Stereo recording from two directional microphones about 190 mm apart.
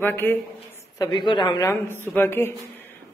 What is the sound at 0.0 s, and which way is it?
Speech, 10° left (ahead or behind).